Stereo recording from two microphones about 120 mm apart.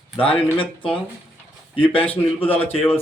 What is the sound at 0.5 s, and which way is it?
Speech, 45° left (ahead or behind).